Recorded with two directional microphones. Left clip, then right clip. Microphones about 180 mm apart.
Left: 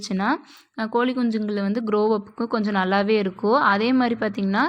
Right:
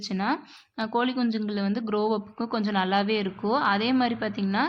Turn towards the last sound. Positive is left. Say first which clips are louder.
# left 5 dB
turn(degrees=25)  # may be behind; listen again after turning